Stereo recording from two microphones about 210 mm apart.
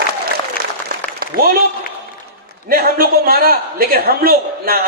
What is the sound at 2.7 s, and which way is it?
A man's voice, 45° right (ahead or behind).